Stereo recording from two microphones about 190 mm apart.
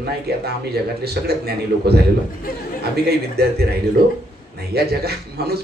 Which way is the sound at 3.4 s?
55° right (ahead or behind).